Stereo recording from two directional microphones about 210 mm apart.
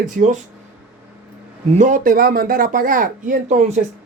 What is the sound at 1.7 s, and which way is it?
Speech, 35° right (ahead or behind).